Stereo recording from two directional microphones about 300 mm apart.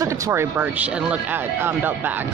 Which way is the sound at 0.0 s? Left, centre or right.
Centre.